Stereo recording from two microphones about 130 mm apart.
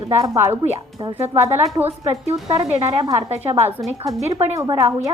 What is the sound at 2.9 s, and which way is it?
Speech, 35° right (ahead or behind).